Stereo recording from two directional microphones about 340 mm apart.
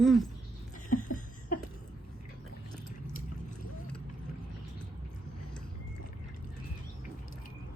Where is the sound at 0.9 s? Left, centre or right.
Left.